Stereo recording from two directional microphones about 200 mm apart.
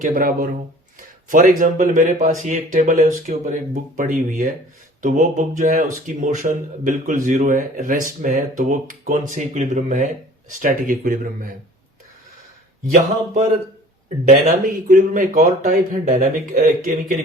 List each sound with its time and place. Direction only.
0.0 s speech: 45° right (ahead or behind)
14.3 s speech: 40° right (ahead or behind)